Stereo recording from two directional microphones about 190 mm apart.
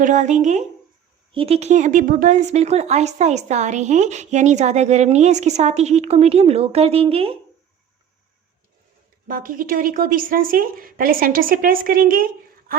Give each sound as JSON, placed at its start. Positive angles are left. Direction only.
{"t": 0.0, "sound": "a woman's voice", "side_deg": -40}
{"t": 9.2, "sound": "speech", "side_deg": -45}